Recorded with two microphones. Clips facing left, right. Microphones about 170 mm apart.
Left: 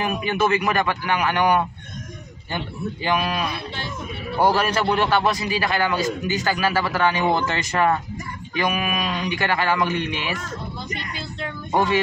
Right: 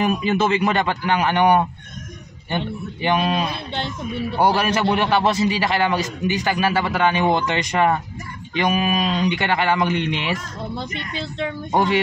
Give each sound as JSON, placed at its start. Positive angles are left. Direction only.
{"t": 0.0, "sound": "a man's voice", "side_deg": -30}